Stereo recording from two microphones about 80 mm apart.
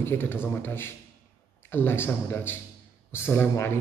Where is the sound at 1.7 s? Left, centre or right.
Left.